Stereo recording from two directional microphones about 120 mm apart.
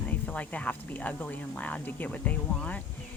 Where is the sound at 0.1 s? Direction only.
15° left (ahead or behind).